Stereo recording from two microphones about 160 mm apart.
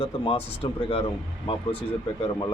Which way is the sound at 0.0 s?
40° left (ahead or behind).